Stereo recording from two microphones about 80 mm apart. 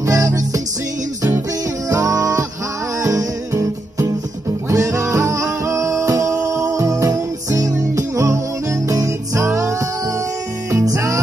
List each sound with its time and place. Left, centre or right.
0.0 s music: right
1.9 s music: right